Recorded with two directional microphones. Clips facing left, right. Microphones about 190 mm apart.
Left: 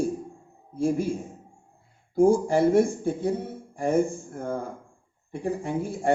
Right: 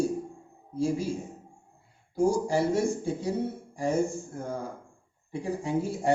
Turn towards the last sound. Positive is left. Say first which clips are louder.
# even
turn(degrees=55)  # may be behind; listen again after turning